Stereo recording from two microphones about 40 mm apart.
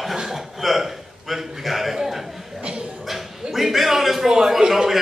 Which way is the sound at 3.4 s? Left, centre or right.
Centre.